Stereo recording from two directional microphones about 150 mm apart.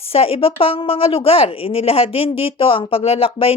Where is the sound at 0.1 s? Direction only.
40° left (ahead or behind).